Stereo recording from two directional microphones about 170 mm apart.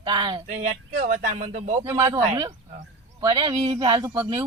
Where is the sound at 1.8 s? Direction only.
20° right (ahead or behind).